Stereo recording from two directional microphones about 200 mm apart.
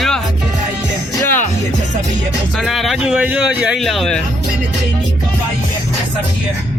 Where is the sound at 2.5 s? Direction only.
Centre (ahead or behind).